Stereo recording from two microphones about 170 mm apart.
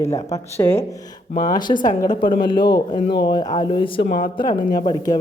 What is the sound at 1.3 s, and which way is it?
Speech, 50° left (ahead or behind).